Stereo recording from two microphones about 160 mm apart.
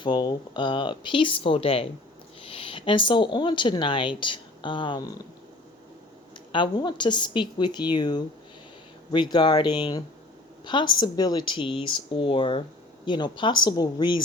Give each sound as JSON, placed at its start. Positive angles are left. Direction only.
{"t": 0.0, "sound": "speech", "side_deg": 25}
{"t": 6.5, "sound": "a woman's voice", "side_deg": 30}